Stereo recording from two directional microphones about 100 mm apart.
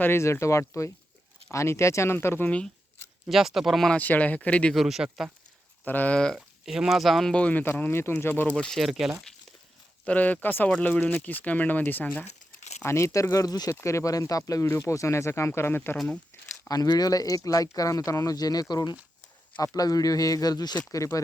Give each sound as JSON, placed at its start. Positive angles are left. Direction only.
{"t": 0.0, "sound": "speech", "side_deg": 25}
{"t": 3.2, "sound": "speech", "side_deg": 0}
{"t": 3.9, "sound": "speech", "side_deg": 15}
{"t": 4.7, "sound": "speech", "side_deg": 0}
{"t": 5.8, "sound": "speech", "side_deg": 15}
{"t": 6.3, "sound": "speech", "side_deg": -5}
{"t": 8.8, "sound": "speech", "side_deg": -5}
{"t": 10.0, "sound": "speech", "side_deg": 15}
{"t": 12.8, "sound": "speech", "side_deg": 30}
{"t": 16.6, "sound": "speech", "side_deg": 40}